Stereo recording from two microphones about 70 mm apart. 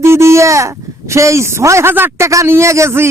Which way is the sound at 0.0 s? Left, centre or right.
Right.